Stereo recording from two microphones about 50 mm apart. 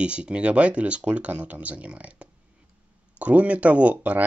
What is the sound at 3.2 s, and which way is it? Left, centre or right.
Speech, right.